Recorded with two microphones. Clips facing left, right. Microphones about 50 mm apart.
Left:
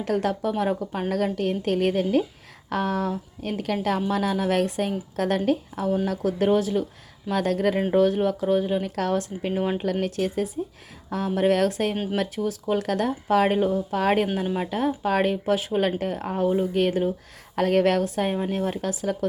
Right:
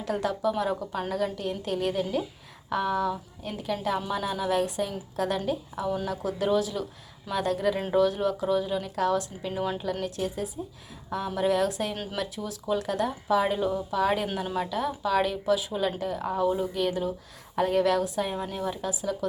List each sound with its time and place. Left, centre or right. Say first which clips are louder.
0.0 s speech: left 3 dB; left
1.1 s speech: left 6 dB; left
2.6 s speech: left 1 dB; left
7.3 s speech: left 4 dB; left
9.5 s speech: left 4 dB; left
9.7 s speech: left 5 dB; left